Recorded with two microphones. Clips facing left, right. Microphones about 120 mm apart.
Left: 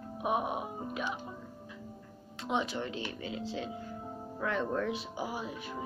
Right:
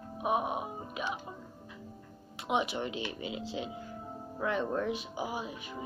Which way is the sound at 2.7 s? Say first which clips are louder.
Right 1 dB; 15° right (ahead or behind).